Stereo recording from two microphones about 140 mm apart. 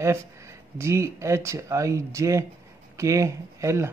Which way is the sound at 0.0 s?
20° right (ahead or behind).